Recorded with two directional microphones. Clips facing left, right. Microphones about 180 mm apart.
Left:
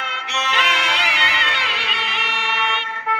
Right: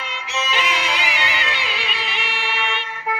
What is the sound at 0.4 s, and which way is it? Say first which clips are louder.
Music: even; 70° left (ahead or behind).